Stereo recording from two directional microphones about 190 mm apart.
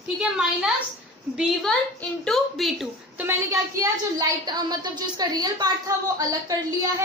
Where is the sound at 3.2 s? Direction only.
15° right (ahead or behind).